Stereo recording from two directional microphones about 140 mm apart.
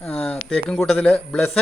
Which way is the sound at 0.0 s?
5° left (ahead or behind).